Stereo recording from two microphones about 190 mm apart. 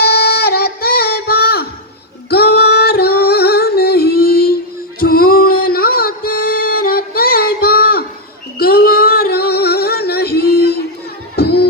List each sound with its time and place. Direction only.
0.0 s music: 55° left (ahead or behind)
2.3 s singing: 55° left (ahead or behind)
4.9 s music: 50° left (ahead or behind)
8.5 s singing: 55° left (ahead or behind)
11.3 s music: 55° left (ahead or behind)